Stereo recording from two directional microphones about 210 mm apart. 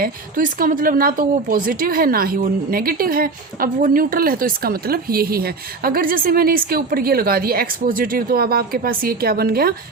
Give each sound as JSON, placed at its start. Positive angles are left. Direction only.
{"t": 0.0, "sound": "a woman's voice", "side_deg": -40}